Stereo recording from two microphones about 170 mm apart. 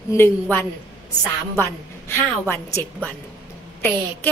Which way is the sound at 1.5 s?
15° left (ahead or behind).